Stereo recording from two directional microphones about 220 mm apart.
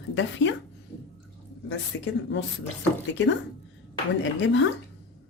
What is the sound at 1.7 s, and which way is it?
Speech, 55° left (ahead or behind).